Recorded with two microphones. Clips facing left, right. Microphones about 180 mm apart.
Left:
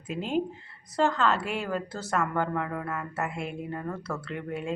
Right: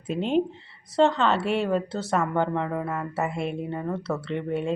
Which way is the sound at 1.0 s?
30° right (ahead or behind).